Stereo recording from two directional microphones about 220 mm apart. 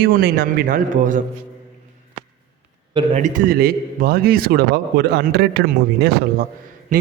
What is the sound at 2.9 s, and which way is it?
A man's voice, 30° right (ahead or behind).